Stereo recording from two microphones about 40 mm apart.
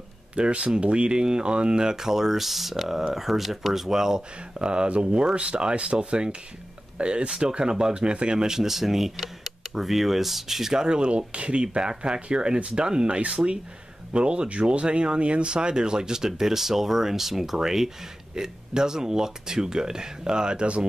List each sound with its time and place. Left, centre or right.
0.4 s speech: right